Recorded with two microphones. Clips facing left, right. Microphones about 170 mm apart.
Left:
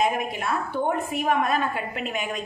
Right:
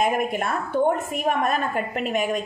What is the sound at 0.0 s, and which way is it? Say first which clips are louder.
A woman's voice: right 2 dB; 50° right (ahead or behind).